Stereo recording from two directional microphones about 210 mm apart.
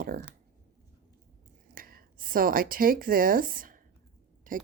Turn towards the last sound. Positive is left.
turn(degrees=-40)  # may be behind; listen again after turning